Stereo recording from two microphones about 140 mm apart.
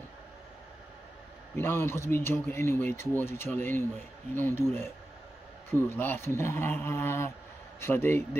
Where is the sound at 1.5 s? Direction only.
15° left (ahead or behind).